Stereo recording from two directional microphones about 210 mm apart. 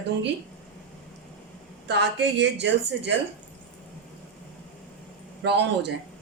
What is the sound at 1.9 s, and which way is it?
Speech, 55° right (ahead or behind).